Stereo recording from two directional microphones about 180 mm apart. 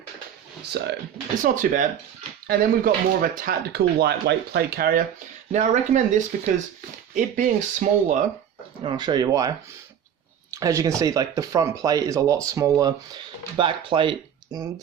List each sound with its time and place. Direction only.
1.4 s speech: 45° right (ahead or behind)
5.5 s speech: 40° right (ahead or behind)
8.8 s speech: 25° right (ahead or behind)
10.5 s speech: 20° right (ahead or behind)